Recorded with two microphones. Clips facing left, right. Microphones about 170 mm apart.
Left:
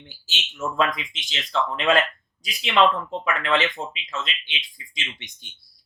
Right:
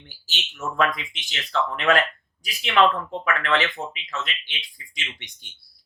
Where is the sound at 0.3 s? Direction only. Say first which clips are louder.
Left 2 dB; 20° left (ahead or behind).